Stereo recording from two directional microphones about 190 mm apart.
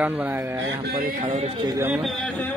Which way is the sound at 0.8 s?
50° right (ahead or behind).